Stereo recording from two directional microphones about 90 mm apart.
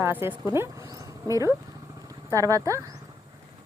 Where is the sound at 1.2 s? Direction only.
35° right (ahead or behind).